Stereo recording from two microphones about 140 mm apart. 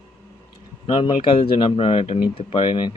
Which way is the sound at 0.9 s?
35° left (ahead or behind).